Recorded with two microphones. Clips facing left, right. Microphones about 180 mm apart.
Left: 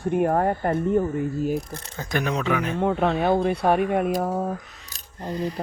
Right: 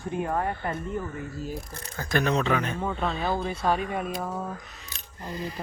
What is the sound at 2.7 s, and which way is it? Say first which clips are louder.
Speech: left 7 dB; 65° left (ahead or behind).